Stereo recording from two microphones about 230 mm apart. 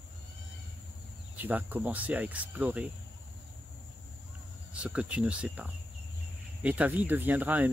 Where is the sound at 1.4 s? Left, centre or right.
Centre.